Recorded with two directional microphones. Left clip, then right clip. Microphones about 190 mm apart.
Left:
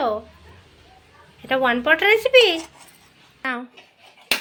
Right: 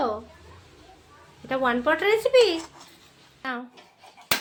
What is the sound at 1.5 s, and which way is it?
A child's voice, 15° left (ahead or behind).